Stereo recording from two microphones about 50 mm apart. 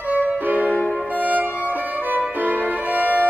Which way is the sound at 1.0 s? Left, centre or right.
Right.